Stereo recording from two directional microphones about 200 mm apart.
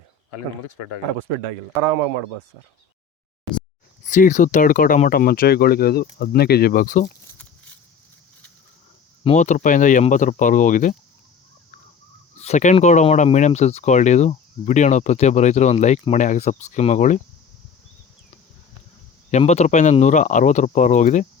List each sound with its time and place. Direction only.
4.0 s speech: 40° left (ahead or behind)
9.2 s speech: 35° left (ahead or behind)
12.4 s speech: 35° left (ahead or behind)
19.3 s speech: 35° left (ahead or behind)